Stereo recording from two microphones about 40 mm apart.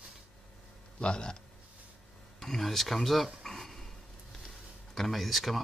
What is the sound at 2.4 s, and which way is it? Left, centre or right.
Speech, centre.